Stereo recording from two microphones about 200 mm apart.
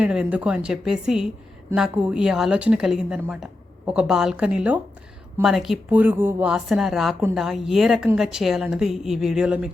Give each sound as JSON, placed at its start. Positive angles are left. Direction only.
{"t": 0.0, "sound": "a woman's voice", "side_deg": -5}